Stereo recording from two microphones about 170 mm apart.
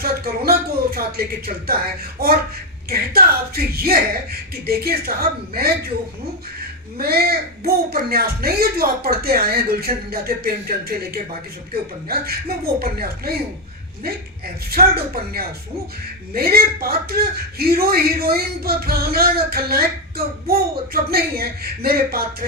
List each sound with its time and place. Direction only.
0.0 s a man's voice: 65° right (ahead or behind)
7.0 s a man's voice: 65° right (ahead or behind)
14.7 s a man's voice: 65° right (ahead or behind)